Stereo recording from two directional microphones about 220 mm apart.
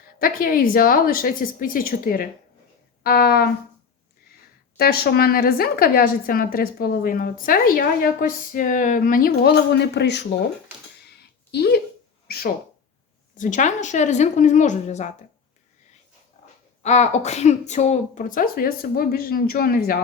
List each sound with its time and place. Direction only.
0.2 s a woman's voice: 40° left (ahead or behind)
4.8 s a woman's voice: 45° left (ahead or behind)
11.5 s a woman's voice: 45° left (ahead or behind)
13.3 s speech: 35° left (ahead or behind)
16.4 s dog: 30° left (ahead or behind)
16.8 s speech: 30° left (ahead or behind)